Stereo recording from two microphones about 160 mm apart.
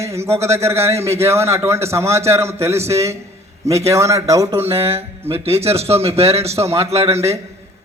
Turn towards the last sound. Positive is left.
turn(degrees=-15)  # may be behind; listen again after turning